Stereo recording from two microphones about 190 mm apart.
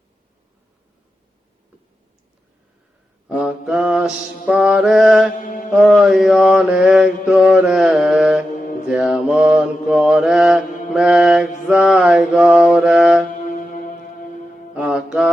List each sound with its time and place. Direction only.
3.2 s mantra: 5° right (ahead or behind)
5.4 s mantra: 45° left (ahead or behind)
5.8 s mantra: centre (ahead or behind)
8.5 s mantra: 45° left (ahead or behind)
8.9 s mantra: 5° right (ahead or behind)
10.7 s mantra: 45° left (ahead or behind)
10.9 s mantra: 5° right (ahead or behind)
13.4 s a sound: 45° left (ahead or behind)
14.7 s mantra: 5° right (ahead or behind)